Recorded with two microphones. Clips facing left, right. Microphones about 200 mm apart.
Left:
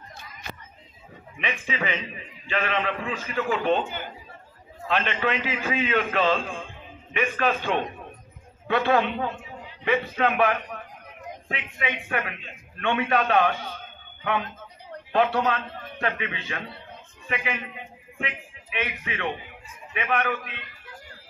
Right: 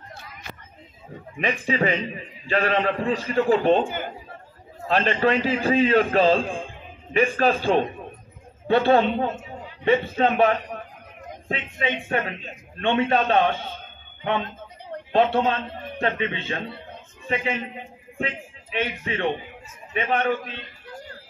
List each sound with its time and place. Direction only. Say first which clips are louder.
1.4 s a man's voice: right 7 dB; 40° right (ahead or behind)
3.8 s a man's voice: right 6 dB; 50° right (ahead or behind)
4.8 s a man's voice: right 5 dB; 35° right (ahead or behind)